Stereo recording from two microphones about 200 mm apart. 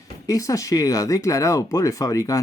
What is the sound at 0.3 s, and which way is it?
Speech, 15° left (ahead or behind).